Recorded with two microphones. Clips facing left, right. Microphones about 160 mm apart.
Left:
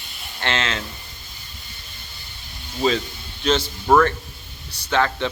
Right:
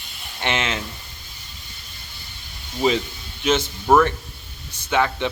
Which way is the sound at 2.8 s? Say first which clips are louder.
Right 1 dB; 15° right (ahead or behind).